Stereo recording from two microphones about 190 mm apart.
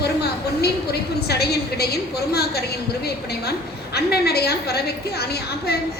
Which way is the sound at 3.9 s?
55° left (ahead or behind).